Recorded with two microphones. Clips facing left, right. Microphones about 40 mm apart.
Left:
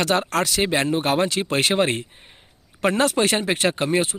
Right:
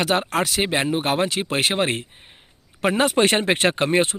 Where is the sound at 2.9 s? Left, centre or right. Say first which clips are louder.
Right 1 dB; right.